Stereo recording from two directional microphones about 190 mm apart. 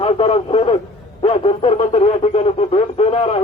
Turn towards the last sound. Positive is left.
turn(degrees=30)  # may be behind; listen again after turning